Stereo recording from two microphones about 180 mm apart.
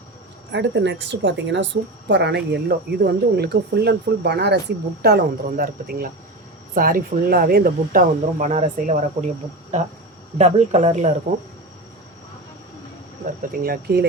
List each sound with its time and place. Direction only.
0.5 s a woman's voice: 90° right; by 9.3 s 40° right (ahead or behind)
10.3 s speech: 40° right (ahead or behind)
13.5 s speech: 55° right (ahead or behind)